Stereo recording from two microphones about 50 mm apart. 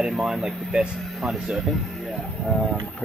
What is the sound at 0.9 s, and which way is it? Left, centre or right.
Speech, centre.